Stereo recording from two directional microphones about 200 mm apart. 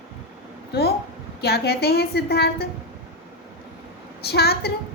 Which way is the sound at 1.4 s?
50° left (ahead or behind).